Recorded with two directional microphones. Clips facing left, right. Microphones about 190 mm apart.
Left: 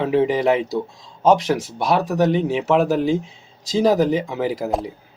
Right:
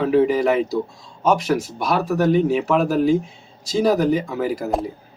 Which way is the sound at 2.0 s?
20° left (ahead or behind).